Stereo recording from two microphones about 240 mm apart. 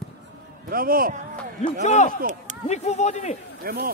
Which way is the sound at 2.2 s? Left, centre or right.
Right.